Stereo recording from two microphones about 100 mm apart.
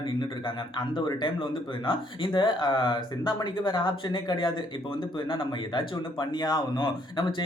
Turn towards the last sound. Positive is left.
turn(degrees=55)  # may be behind; listen again after turning